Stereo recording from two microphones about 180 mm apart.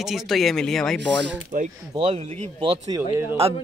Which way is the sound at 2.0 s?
35° right (ahead or behind).